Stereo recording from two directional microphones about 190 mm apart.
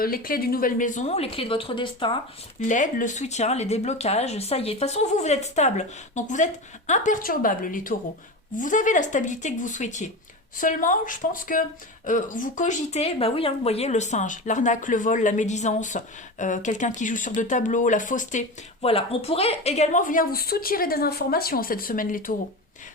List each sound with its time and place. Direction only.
0.0 s speech: 50° left (ahead or behind); by 2.1 s 25° left (ahead or behind)
2.6 s speech: 40° left (ahead or behind)